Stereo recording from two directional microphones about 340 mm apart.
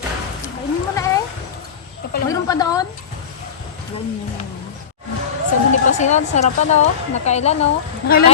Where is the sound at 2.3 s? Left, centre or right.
Centre.